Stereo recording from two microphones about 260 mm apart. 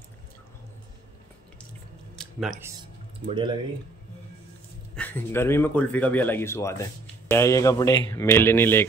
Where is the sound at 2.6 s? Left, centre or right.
Centre.